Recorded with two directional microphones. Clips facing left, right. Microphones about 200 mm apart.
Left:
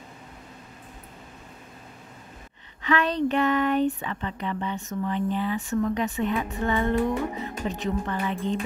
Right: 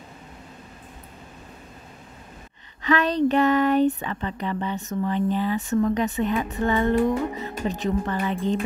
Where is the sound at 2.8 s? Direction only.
40° right (ahead or behind).